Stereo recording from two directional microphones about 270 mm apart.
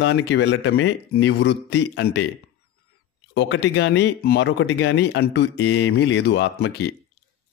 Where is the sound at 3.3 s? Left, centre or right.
Left.